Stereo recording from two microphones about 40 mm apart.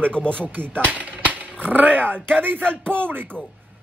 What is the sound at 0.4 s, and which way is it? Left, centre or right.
Speech, right.